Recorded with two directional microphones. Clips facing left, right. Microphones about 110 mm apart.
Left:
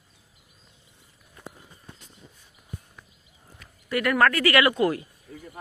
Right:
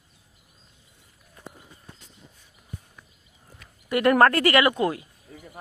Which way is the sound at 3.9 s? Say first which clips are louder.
Right 4 dB; 25° right (ahead or behind).